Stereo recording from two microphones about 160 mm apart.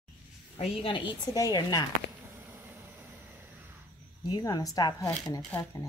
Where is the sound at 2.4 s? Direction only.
15° right (ahead or behind).